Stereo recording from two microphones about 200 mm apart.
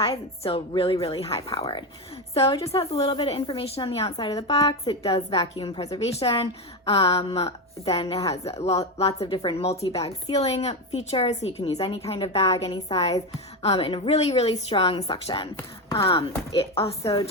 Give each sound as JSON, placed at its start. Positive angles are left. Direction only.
{"t": 0.0, "sound": "a woman's voice", "side_deg": 25}
{"t": 15.5, "sound": "speech", "side_deg": 15}
{"t": 16.0, "sound": "a woman's voice", "side_deg": 30}